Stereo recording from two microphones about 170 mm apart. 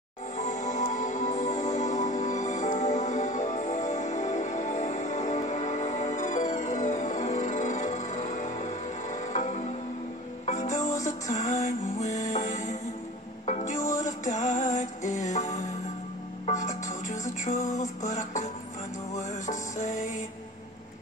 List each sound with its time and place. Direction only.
0.4 s music: 45° left (ahead or behind)